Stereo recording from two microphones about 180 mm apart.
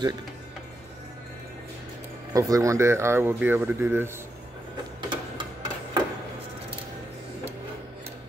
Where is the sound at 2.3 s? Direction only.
20° right (ahead or behind).